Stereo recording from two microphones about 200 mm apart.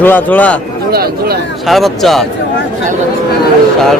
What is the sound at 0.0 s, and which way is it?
Speech, 10° left (ahead or behind).